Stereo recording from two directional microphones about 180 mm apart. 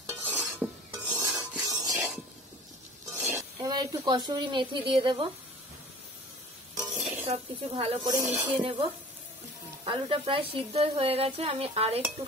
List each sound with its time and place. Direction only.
0.2 s filing: 10° right (ahead or behind)
1.7 s a sound: 20° right (ahead or behind)
3.1 s a sound: 15° right (ahead or behind)
4.3 s speech: 25° right (ahead or behind)
6.8 s music: 5° right (ahead or behind)
7.2 s a woman's voice: 30° right (ahead or behind)
9.8 s a woman's voice: 30° right (ahead or behind)